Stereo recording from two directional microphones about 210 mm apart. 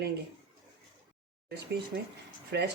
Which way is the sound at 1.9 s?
45° right (ahead or behind).